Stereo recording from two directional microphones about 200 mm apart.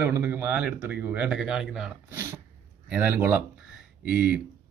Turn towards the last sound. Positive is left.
turn(degrees=50)  # may be behind; listen again after turning